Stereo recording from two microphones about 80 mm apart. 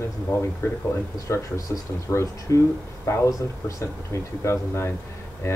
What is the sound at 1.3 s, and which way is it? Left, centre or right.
Speech, left.